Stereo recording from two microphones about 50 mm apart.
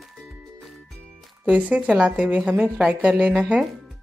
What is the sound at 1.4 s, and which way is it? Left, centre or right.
Speech, right.